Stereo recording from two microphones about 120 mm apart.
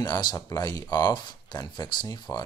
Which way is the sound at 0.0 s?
35° left (ahead or behind).